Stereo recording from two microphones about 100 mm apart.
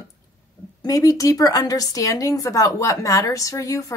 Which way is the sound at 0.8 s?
35° left (ahead or behind).